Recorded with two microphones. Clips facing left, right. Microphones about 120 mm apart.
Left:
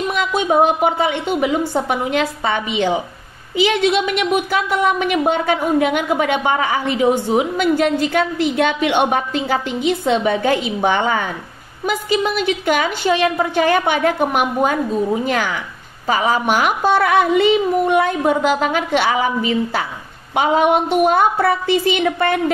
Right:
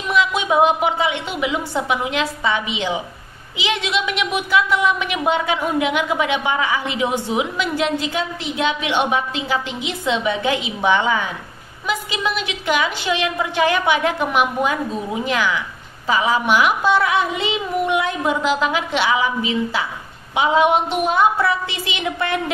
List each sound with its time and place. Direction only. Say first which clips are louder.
0.1 s a woman's voice: right 1 dB; 50° left (ahead or behind)